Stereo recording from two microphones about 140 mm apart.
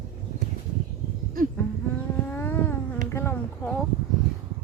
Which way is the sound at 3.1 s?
20° left (ahead or behind).